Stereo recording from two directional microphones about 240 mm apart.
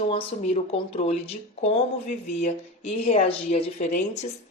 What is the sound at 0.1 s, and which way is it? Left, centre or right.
Speech, left.